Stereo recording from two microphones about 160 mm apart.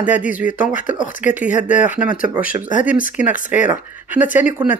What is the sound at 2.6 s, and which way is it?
Speech, 55° left (ahead or behind).